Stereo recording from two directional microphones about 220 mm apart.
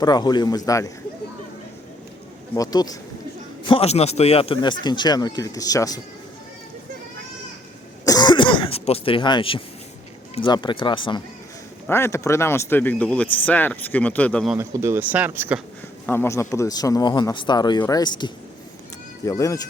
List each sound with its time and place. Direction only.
0.0 s speech: 20° left (ahead or behind)
2.6 s a man's voice: 15° left (ahead or behind)
8.0 s throat clearing: 20° left (ahead or behind)
10.3 s a man's voice: 20° left (ahead or behind)
11.9 s speech: 10° left (ahead or behind)
14.5 s speech: 10° right (ahead or behind)
16.0 s speech: 10° left (ahead or behind)